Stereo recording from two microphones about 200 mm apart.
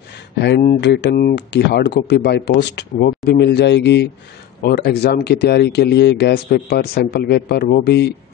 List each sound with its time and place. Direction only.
0.4 s speech: 50° left (ahead or behind)